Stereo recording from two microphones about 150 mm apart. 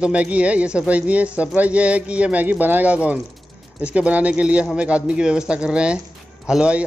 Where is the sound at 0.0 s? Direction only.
10° right (ahead or behind).